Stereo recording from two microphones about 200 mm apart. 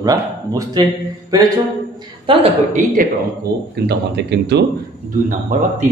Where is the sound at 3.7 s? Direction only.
55° right (ahead or behind).